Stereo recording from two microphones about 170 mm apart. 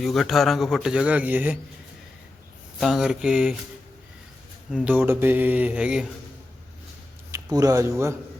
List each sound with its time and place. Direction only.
0.0 s a man's voice: centre (ahead or behind)
2.8 s a man's voice: 5° right (ahead or behind)
4.7 s speech: 10° right (ahead or behind)
7.3 s speech: 20° right (ahead or behind)